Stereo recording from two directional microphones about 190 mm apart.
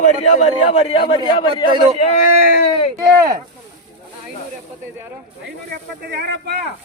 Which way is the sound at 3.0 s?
15° right (ahead or behind).